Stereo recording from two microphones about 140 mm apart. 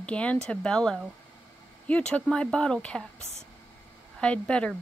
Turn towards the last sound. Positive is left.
turn(degrees=5)  # may be behind; listen again after turning